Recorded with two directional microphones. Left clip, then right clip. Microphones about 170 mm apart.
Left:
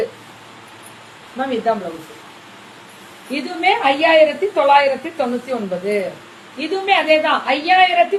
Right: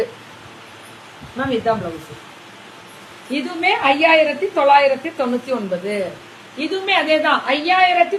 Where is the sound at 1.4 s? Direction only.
20° right (ahead or behind).